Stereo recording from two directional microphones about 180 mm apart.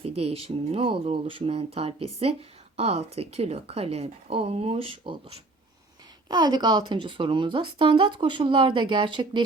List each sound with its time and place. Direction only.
0.0 s speech: 35° right (ahead or behind)
6.2 s speech: 25° right (ahead or behind)